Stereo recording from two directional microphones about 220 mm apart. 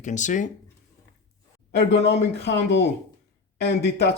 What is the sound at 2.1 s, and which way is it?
Speech, 50° left (ahead or behind).